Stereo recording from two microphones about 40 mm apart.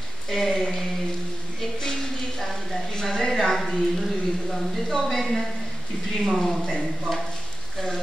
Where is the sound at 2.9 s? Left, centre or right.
Centre.